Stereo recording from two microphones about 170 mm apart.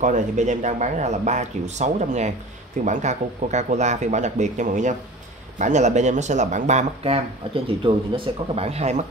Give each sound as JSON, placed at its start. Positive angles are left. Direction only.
{"t": 0.0, "sound": "speech", "side_deg": -45}